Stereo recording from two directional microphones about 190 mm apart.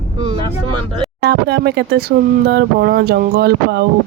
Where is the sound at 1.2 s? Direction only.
60° right (ahead or behind).